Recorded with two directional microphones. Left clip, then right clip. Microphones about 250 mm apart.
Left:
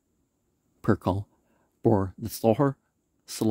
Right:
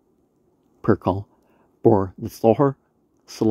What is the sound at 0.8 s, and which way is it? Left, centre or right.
Speech, left.